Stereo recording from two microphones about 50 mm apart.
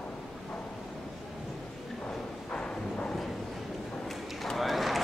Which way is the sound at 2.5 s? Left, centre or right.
Left.